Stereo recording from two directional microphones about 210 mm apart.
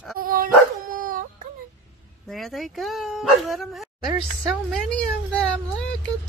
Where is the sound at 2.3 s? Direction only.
Centre (ahead or behind).